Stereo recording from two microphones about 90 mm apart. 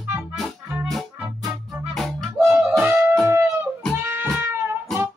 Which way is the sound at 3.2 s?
30° right (ahead or behind).